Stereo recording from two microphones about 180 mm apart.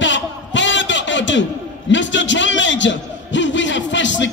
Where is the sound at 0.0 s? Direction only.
90° left.